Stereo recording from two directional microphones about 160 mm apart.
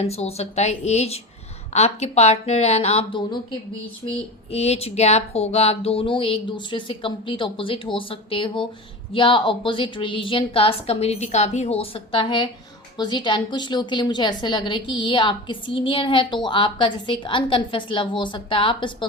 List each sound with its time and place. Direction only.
0.0 s a woman's voice: 40° left (ahead or behind)
4.5 s a woman's voice: 40° left (ahead or behind)